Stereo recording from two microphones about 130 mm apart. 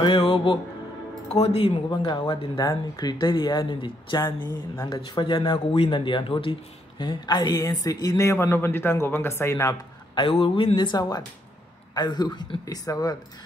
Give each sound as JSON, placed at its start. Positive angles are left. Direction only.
{"t": 0.0, "sound": "music", "side_deg": 45}
{"t": 1.3, "sound": "speech", "side_deg": 50}
{"t": 1.9, "sound": "speech", "side_deg": 35}
{"t": 10.1, "sound": "speech", "side_deg": 40}